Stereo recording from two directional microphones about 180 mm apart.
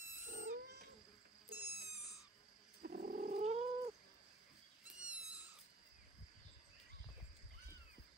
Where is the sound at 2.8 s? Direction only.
55° right (ahead or behind); by 3.6 s 40° right (ahead or behind).